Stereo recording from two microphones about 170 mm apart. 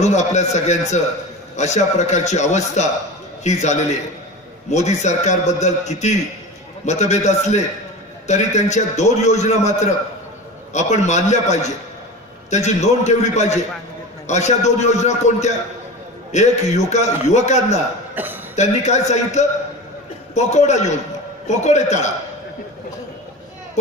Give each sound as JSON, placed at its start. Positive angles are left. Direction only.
{"t": 0.0, "sound": "a man's voice", "side_deg": 45}
{"t": 18.1, "sound": "speech", "side_deg": -10}
{"t": 18.6, "sound": "a man's voice", "side_deg": 40}